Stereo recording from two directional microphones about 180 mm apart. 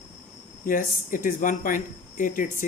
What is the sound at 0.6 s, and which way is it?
Speech, 50° left (ahead or behind).